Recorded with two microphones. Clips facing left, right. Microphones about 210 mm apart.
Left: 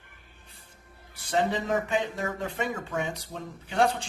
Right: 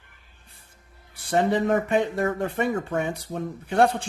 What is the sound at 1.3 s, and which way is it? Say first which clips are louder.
Speech: right 5 dB; 60° right (ahead or behind).